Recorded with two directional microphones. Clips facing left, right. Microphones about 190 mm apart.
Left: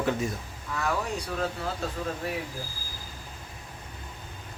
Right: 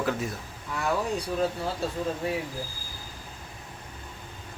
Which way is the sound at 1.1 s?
30° right (ahead or behind).